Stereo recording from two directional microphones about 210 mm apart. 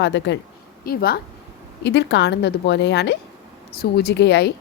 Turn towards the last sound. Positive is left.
turn(degrees=55)  # may be behind; listen again after turning